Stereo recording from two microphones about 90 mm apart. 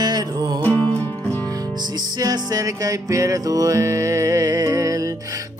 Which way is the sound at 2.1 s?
45° right (ahead or behind).